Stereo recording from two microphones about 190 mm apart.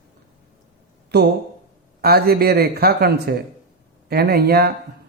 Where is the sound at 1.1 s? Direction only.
60° right (ahead or behind).